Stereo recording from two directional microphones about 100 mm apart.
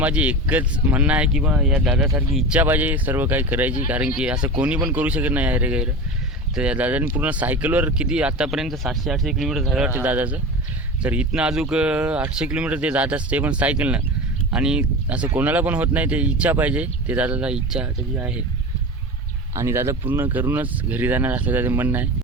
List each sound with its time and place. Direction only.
0.0 s speech: 15° right (ahead or behind)
9.9 s speech: 15° right (ahead or behind)
19.5 s speech: 30° right (ahead or behind)